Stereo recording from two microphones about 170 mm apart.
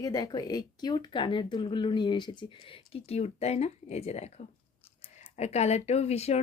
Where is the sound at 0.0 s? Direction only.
20° left (ahead or behind); by 4.3 s 40° left (ahead or behind).